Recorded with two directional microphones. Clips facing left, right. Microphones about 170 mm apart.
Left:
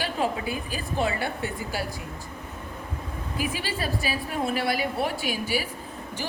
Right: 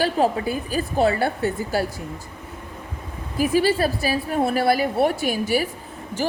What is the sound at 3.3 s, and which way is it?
A woman's voice, 40° right (ahead or behind).